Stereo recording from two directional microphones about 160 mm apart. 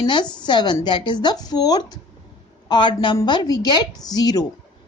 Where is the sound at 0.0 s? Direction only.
30° left (ahead or behind).